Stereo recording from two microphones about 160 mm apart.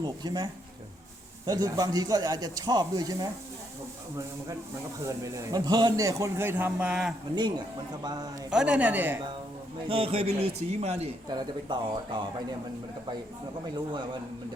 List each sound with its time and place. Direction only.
0.0 s a man's voice: 25° right (ahead or behind)
1.5 s a man's voice: 25° right (ahead or behind)
5.0 s a man's voice: 20° right (ahead or behind)
7.3 s a man's voice: 25° right (ahead or behind)
8.4 s speech: 5° right (ahead or behind)
9.9 s a man's voice: 35° right (ahead or behind)
11.3 s a man's voice: 25° right (ahead or behind)